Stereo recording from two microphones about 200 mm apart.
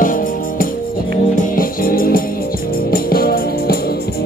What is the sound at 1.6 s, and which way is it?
Music, 45° left (ahead or behind).